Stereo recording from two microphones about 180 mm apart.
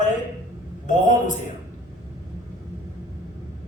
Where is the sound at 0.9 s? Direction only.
45° left (ahead or behind).